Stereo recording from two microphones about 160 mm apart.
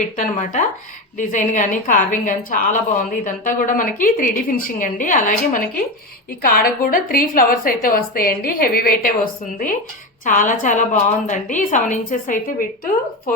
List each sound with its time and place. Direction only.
0.2 s a woman's voice: 50° left (ahead or behind)